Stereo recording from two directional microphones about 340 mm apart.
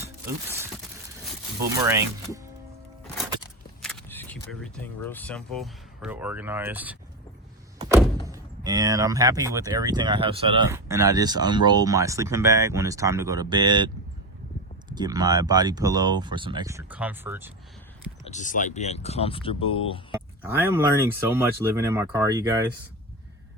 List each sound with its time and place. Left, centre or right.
0.0 s speech: centre
3.8 s vehicle: centre
4.6 s speech: centre
7.8 s thunk: centre
8.3 s speech: centre
18.3 s speech: left
20.4 s speech: centre